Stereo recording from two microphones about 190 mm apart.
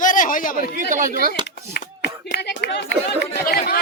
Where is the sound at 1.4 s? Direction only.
25° right (ahead or behind).